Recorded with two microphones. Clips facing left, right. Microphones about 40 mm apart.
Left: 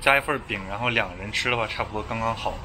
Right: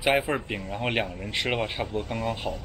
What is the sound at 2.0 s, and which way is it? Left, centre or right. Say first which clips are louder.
Speech: left 3 dB; left.